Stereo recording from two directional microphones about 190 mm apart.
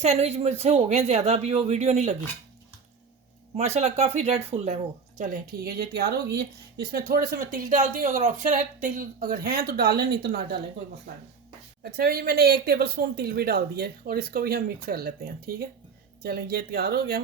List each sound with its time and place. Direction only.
0.0 s speech: 35° right (ahead or behind)
3.8 s speech: 35° right (ahead or behind); by 10.6 s 55° right (ahead or behind)
11.8 s speech: 55° right (ahead or behind)